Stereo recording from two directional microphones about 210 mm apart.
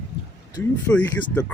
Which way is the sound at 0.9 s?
5° left (ahead or behind).